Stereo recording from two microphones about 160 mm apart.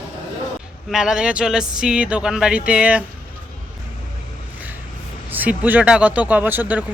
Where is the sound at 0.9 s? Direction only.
5° right (ahead or behind).